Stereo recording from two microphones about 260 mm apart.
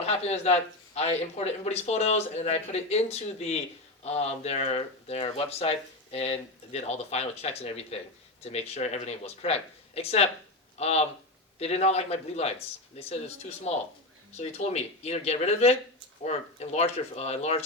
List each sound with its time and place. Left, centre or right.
0.0 s speech: left